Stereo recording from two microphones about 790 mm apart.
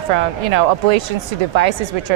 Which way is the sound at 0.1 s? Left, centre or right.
Right.